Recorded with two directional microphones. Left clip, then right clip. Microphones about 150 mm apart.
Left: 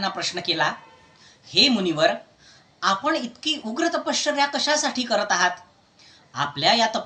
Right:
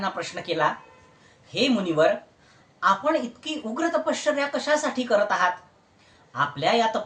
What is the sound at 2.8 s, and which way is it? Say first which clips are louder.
Speech: right 1 dB; 10° right (ahead or behind).